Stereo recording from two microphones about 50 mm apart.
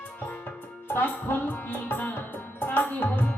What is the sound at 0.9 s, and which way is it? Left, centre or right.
Music, left.